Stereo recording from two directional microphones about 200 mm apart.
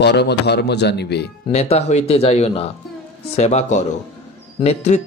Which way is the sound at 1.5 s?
35° left (ahead or behind).